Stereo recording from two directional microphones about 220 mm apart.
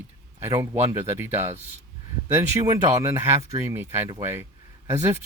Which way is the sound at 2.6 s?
15° right (ahead or behind).